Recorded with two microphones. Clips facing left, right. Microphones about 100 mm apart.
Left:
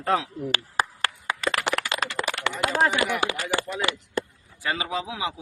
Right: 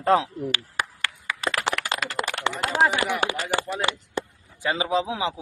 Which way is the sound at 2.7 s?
20° right (ahead or behind).